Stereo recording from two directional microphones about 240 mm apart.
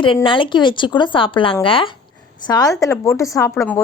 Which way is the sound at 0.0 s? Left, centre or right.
Left.